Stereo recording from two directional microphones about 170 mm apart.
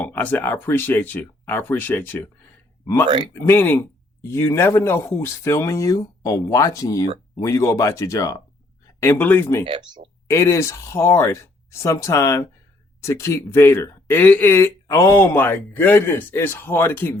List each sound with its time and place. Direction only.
0.0 s speech: 10° left (ahead or behind)
9.6 s speech: 30° right (ahead or behind)
10.2 s speech: 15° left (ahead or behind)